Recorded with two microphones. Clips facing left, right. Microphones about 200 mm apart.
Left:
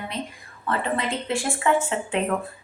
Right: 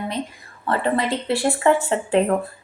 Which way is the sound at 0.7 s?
35° right (ahead or behind).